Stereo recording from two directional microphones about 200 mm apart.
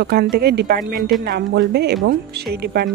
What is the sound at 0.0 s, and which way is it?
Speech, 50° right (ahead or behind).